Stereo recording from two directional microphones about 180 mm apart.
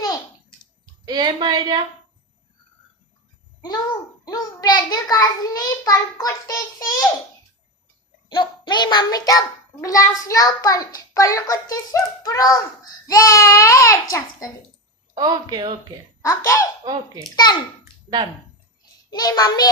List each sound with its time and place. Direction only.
1.0 s a woman's voice: 25° right (ahead or behind)
4.3 s a child's voice: 20° left (ahead or behind)
8.3 s a child's voice: 25° left (ahead or behind)
15.1 s a woman's voice: 20° right (ahead or behind)
16.2 s a child's voice: 15° left (ahead or behind)
16.8 s a woman's voice: 20° right (ahead or behind)
17.3 s a child's voice: 25° left (ahead or behind)
19.1 s a child's voice: 20° left (ahead or behind)